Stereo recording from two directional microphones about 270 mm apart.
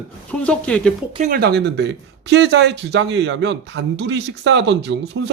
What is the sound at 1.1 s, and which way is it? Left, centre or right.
Speech, right.